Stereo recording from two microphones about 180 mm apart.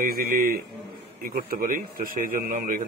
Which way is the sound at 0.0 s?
55° right (ahead or behind).